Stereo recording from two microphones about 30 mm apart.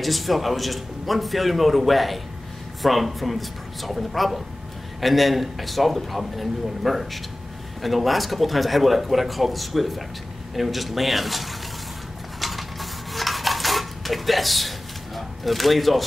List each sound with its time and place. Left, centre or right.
0.0 s a man's voice: centre
12.4 s mechanisms: centre
13.1 s dishes: centre
15.1 s speech: centre